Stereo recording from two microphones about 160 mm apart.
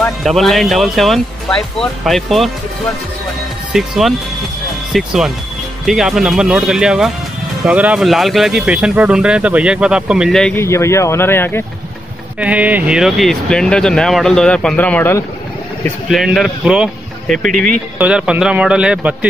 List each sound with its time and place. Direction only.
0.2 s speech: centre (ahead or behind)
3.7 s speech: 5° right (ahead or behind)
10.5 s speech: 15° left (ahead or behind)
12.4 s speech: 10° right (ahead or behind); by 15.2 s 10° left (ahead or behind)
16.1 s speech: centre (ahead or behind)
17.9 s a man's voice: 5° right (ahead or behind)